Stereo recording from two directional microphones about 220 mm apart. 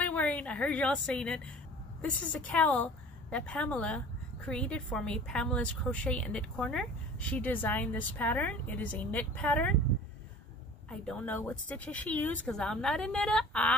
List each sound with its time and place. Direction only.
0.0 s a woman's voice: 5° left (ahead or behind)
10.9 s a woman's voice: 5° left (ahead or behind)